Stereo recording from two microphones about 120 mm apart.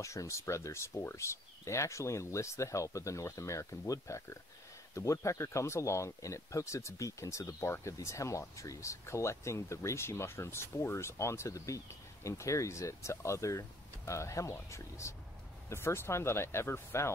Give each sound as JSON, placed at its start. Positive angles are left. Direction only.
{"t": 0.0, "sound": "speech", "side_deg": 25}